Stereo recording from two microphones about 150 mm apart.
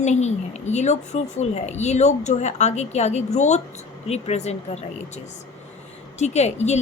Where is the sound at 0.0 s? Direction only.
50° left (ahead or behind).